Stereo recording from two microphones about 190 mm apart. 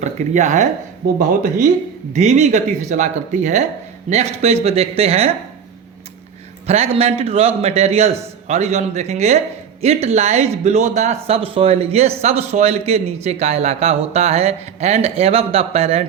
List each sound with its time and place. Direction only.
0.0 s speech: 40° right (ahead or behind)
6.7 s speech: 30° right (ahead or behind)